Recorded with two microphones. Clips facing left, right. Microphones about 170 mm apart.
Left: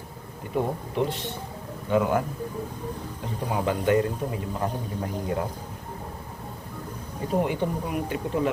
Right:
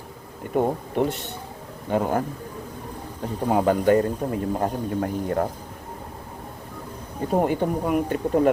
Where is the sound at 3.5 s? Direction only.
40° right (ahead or behind).